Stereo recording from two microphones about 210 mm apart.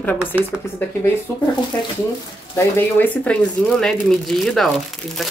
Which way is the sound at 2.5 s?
10° left (ahead or behind).